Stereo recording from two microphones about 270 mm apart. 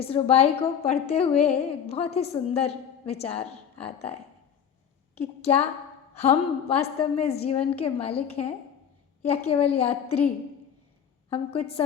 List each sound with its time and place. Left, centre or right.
0.0 s a woman's voice: left
11.3 s a woman's voice: left